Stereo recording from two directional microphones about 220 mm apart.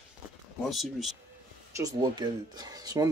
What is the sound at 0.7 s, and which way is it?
Speech, centre (ahead or behind).